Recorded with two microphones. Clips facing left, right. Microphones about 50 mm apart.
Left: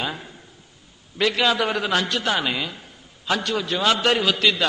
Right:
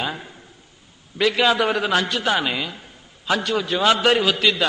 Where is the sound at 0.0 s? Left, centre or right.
Centre.